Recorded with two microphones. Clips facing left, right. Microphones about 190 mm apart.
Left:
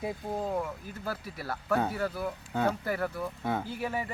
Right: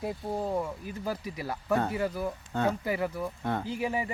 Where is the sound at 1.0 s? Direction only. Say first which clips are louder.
Right 2 dB; 15° right (ahead or behind).